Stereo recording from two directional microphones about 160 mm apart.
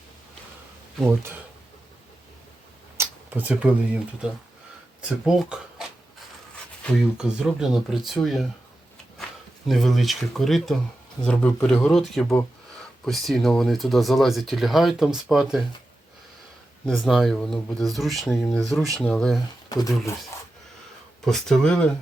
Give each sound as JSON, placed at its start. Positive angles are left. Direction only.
{"t": 1.0, "sound": "speech", "side_deg": -15}
{"t": 3.0, "sound": "speech", "side_deg": -10}
{"t": 7.2, "sound": "speech", "side_deg": -5}
{"t": 9.6, "sound": "speech", "side_deg": 0}
{"t": 16.9, "sound": "speech", "side_deg": 0}
{"t": 19.7, "sound": "speech", "side_deg": 20}
{"t": 21.2, "sound": "speech", "side_deg": 5}